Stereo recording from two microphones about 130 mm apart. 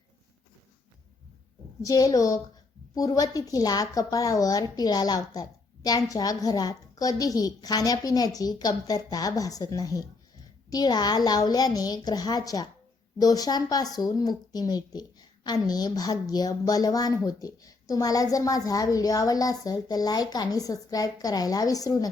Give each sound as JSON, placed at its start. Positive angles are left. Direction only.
{"t": 1.8, "sound": "a woman's voice", "side_deg": 25}